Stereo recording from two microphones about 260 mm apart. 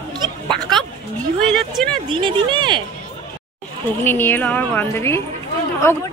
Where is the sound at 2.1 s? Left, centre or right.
Centre.